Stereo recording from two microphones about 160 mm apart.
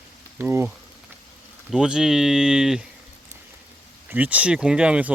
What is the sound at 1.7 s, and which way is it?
Speech, 5° right (ahead or behind).